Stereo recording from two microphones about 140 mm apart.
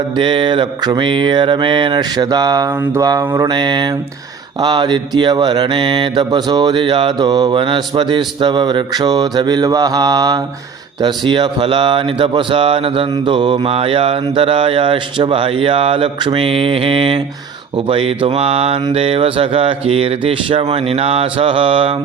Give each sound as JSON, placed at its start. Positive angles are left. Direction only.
{"t": 0.2, "sound": "speech", "side_deg": -35}
{"t": 17.8, "sound": "mantra", "side_deg": -40}